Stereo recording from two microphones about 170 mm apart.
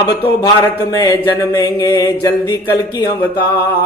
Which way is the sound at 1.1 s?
25° left (ahead or behind).